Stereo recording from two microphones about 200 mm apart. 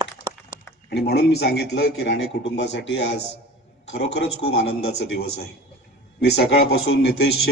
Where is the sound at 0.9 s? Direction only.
55° left (ahead or behind).